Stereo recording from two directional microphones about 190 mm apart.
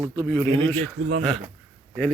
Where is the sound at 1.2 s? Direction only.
Centre (ahead or behind).